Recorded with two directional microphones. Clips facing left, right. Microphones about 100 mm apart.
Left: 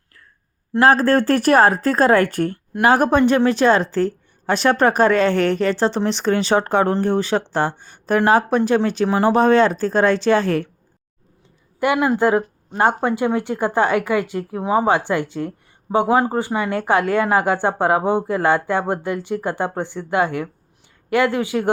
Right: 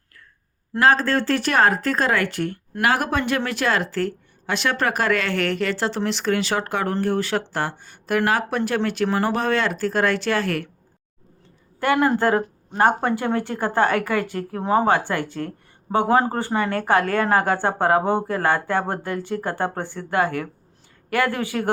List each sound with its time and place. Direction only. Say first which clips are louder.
0.8 s speech: left 4 dB; 45° left (ahead or behind)
2.8 s speech: left 7 dB; 30° left (ahead or behind)
4.4 s speech: left 7 dB; 40° left (ahead or behind); by 9.3 s 20° left (ahead or behind)
9.3 s speech: left 8 dB; 30° left (ahead or behind)
11.8 s speech: left 2 dB; 15° left (ahead or behind)